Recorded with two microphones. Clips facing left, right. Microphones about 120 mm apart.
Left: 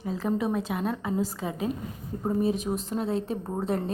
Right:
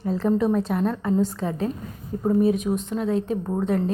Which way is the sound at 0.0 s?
Centre (ahead or behind).